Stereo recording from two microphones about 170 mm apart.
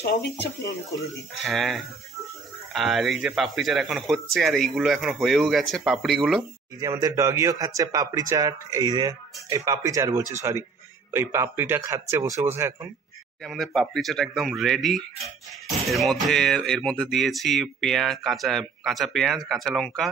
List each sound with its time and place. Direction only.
0.0 s speech: 70° left (ahead or behind)
0.8 s speech: 20° left (ahead or behind)
1.4 s speech: centre (ahead or behind)
6.8 s speech: 20° right (ahead or behind)
13.4 s speech: centre (ahead or behind)